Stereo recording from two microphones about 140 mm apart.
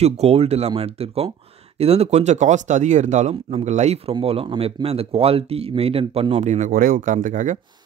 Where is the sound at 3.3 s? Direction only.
45° right (ahead or behind); by 7.6 s 65° right (ahead or behind).